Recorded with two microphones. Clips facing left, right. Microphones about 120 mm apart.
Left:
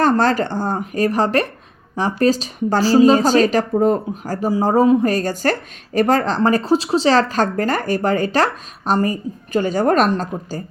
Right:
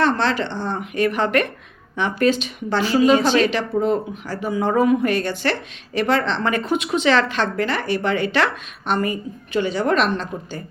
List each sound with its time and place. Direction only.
0.0 s a woman's voice: 45° left (ahead or behind)